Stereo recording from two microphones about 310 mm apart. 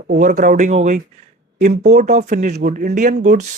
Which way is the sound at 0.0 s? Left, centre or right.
Right.